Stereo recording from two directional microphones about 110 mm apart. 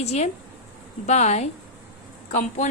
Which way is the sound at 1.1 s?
90° left.